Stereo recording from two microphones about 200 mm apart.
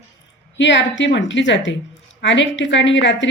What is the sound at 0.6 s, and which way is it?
Speech, 65° left (ahead or behind).